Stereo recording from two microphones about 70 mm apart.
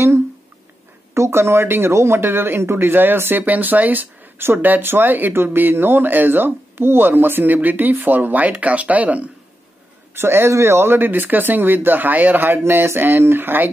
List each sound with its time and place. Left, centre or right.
1.1 s speech: right
10.1 s speech: right